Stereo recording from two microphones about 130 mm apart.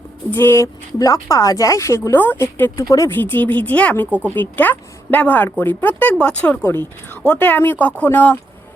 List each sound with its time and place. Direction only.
0.3 s speech: 15° left (ahead or behind)
4.1 s speech: 10° right (ahead or behind)
4.4 s speech: 15° left (ahead or behind)